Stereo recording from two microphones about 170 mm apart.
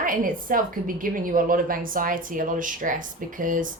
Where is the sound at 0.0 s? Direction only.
55° right (ahead or behind).